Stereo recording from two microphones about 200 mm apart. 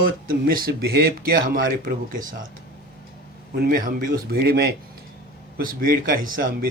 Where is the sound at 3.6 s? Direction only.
45° right (ahead or behind).